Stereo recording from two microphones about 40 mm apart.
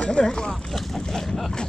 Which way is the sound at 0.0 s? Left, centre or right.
Left.